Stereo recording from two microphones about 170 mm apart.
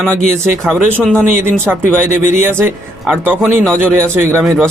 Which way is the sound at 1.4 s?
15° right (ahead or behind).